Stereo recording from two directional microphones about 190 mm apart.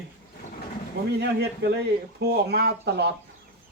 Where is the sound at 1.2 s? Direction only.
60° right (ahead or behind).